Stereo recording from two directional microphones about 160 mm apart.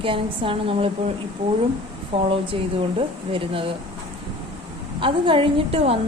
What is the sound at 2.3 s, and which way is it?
A woman's voice, 35° right (ahead or behind).